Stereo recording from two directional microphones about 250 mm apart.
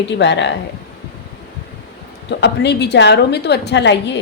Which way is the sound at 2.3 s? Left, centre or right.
Left.